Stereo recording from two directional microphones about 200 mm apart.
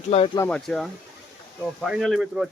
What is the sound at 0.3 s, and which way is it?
Speech, 5° left (ahead or behind).